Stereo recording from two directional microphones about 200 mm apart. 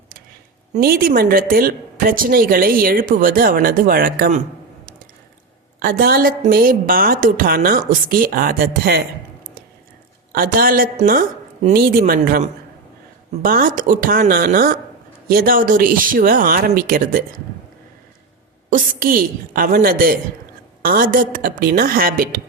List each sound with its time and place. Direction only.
0.8 s a woman's voice: 50° right (ahead or behind)
5.8 s a woman's voice: 45° right (ahead or behind)
10.3 s a woman's voice: 45° right (ahead or behind)
18.7 s a woman's voice: 45° right (ahead or behind)